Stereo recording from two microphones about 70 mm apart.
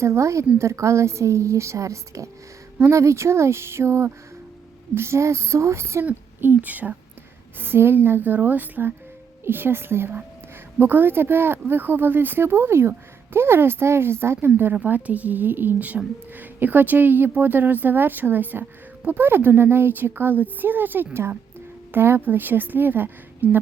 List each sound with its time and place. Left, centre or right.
0.0 s a woman's voice: right
6.1 s speech: right